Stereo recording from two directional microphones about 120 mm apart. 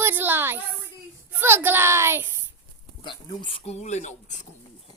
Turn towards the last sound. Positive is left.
turn(degrees=80)